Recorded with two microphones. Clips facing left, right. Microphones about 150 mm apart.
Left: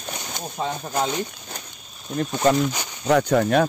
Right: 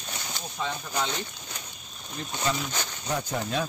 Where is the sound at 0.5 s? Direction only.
40° left (ahead or behind).